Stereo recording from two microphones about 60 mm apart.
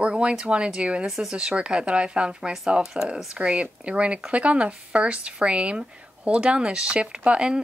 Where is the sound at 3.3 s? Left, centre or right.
Centre.